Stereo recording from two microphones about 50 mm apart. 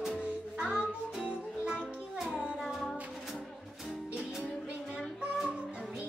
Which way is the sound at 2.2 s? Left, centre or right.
Centre.